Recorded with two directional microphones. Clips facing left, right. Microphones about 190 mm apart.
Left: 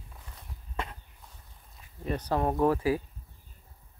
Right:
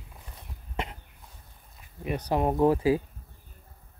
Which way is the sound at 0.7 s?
20° right (ahead or behind).